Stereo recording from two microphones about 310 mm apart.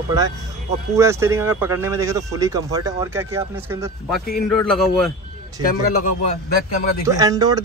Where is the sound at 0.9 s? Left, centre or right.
Centre.